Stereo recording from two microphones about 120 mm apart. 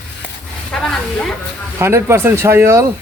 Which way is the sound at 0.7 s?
5° left (ahead or behind).